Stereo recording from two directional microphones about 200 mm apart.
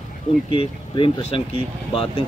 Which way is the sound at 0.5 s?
25° left (ahead or behind).